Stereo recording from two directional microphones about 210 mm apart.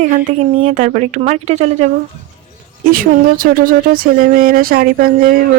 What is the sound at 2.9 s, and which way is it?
Speech, 45° right (ahead or behind).